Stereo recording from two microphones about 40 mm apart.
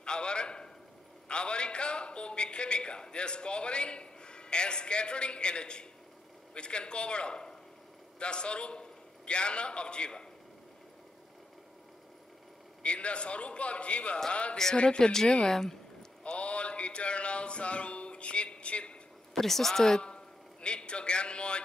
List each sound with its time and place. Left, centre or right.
0.0 s a man's voice: left
12.8 s a man's voice: left; by 15.8 s centre
16.3 s a sound: left
19.3 s speech: centre
20.0 s a man's voice: left